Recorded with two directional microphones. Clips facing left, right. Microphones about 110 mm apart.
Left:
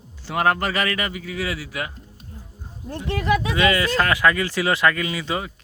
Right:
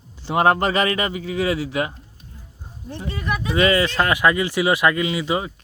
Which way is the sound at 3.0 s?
90° left.